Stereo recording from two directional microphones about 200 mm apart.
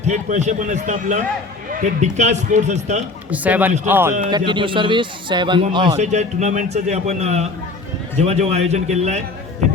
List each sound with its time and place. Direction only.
0.1 s a man's voice: 35° right (ahead or behind)
3.2 s a man's voice: 5° right (ahead or behind)
4.3 s a man's voice: 20° right (ahead or behind)
6.0 s a man's voice: 35° right (ahead or behind)